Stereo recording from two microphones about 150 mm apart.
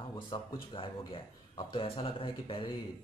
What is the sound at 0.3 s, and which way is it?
A man's voice, 30° left (ahead or behind).